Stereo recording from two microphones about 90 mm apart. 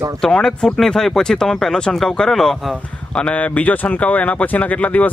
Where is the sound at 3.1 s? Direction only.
10° left (ahead or behind).